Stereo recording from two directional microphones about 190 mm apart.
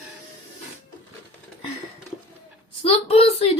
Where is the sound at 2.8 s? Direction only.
30° left (ahead or behind).